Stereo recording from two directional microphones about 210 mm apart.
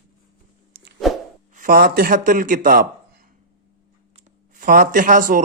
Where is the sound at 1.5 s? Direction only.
40° right (ahead or behind).